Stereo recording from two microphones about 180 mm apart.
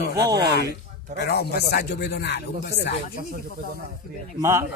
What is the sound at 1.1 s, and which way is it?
Speech, 65° left (ahead or behind).